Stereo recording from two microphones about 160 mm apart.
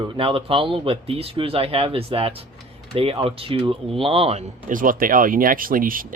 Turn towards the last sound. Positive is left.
turn(degrees=-60)  # may be behind; listen again after turning